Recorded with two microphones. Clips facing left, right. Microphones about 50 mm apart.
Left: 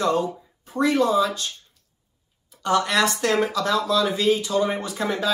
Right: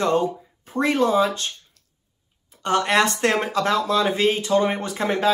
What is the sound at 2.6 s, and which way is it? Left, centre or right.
Speech, right.